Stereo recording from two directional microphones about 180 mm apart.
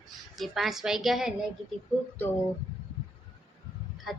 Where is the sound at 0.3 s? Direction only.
Centre (ahead or behind).